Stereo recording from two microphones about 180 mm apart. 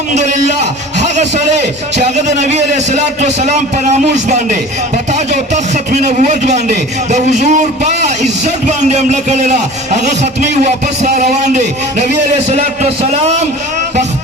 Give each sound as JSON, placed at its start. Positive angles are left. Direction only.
{"t": 2.0, "sound": "a man's voice", "side_deg": -40}
{"t": 5.9, "sound": "a man's voice", "side_deg": -40}